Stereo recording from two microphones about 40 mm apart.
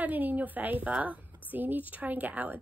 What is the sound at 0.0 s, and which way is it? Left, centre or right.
A woman's voice, right.